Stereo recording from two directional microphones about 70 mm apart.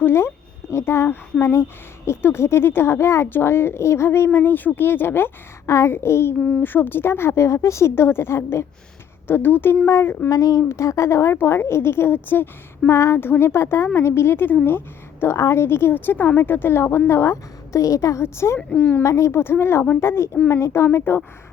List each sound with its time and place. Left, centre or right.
0.0 s speech: left
5.6 s speech: left
10.2 s speech: left
12.9 s speech: left
15.2 s a woman's voice: left
18.7 s speech: left
19.0 s speech: left